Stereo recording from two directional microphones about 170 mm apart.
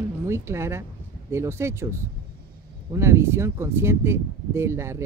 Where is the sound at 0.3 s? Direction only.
15° right (ahead or behind).